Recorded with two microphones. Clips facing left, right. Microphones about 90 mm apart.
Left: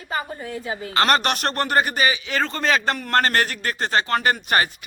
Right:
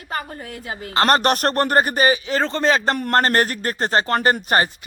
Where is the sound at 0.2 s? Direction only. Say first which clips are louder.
Left 2 dB; 65° right (ahead or behind).